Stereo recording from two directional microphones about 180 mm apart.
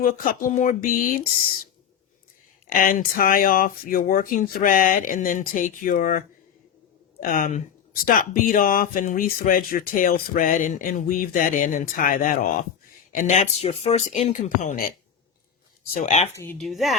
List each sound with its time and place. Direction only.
0.0 s speech: 50° left (ahead or behind)
2.6 s speech: 50° left (ahead or behind)
16.0 s speech: 40° left (ahead or behind)
16.3 s speech: 15° left (ahead or behind)
16.6 s speech: centre (ahead or behind)